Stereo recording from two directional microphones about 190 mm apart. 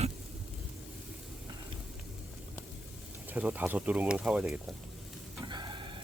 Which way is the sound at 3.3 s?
10° right (ahead or behind).